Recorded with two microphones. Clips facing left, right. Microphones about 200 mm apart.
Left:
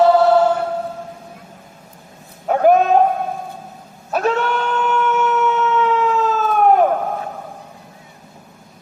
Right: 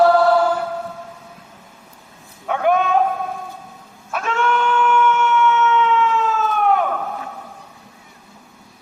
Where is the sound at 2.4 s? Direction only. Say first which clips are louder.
Left 5 dB; 40° left (ahead or behind).